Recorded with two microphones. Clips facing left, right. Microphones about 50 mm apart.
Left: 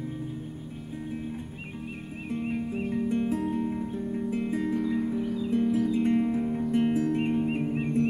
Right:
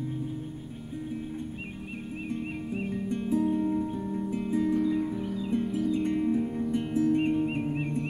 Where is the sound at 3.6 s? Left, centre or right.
Centre.